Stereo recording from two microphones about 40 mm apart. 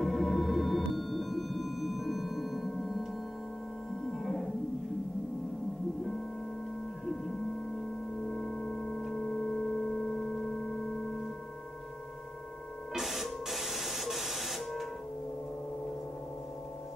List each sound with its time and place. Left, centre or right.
0.0 s music: centre
4.2 s music: centre
8.3 s singing bowl: left
9.1 s tuning fork: centre
12.9 s printer: centre